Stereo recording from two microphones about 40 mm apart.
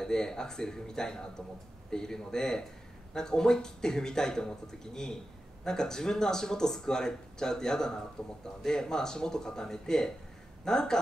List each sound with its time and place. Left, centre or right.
0.0 s a man's voice: centre